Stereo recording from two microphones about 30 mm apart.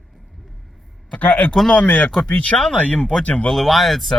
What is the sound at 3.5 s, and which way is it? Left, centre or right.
Speech, centre.